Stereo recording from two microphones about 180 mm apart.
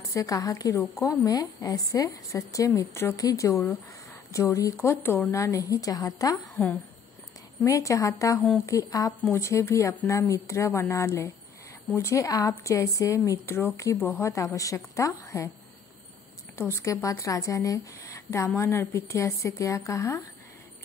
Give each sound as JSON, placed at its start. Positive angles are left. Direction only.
{"t": 0.1, "sound": "a woman's voice", "side_deg": 20}
{"t": 7.6, "sound": "a woman's voice", "side_deg": 15}
{"t": 16.5, "sound": "a woman's voice", "side_deg": 15}